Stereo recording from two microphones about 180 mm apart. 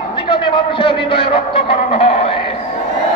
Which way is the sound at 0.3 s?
30° left (ahead or behind).